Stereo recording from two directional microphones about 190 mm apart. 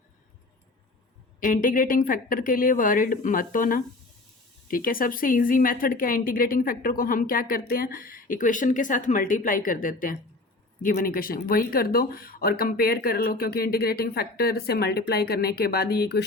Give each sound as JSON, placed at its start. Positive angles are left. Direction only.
{"t": 1.4, "sound": "a woman's voice", "side_deg": 45}